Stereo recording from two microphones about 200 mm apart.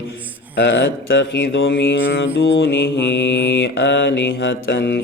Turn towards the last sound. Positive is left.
turn(degrees=60)  # may be behind; listen again after turning